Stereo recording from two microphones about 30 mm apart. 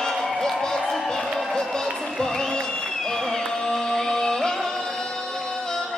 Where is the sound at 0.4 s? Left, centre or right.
Centre.